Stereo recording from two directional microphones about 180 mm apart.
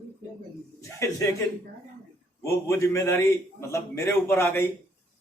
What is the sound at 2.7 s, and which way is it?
A man's voice, 15° left (ahead or behind).